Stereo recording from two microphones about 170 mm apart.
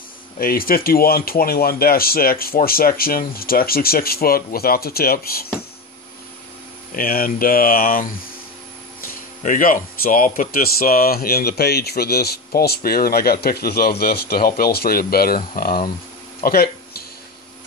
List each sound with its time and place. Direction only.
0.4 s speech: 60° left (ahead or behind)
7.0 s speech: 60° left (ahead or behind)
9.4 s speech: 50° left (ahead or behind)
16.4 s a sound: 60° left (ahead or behind)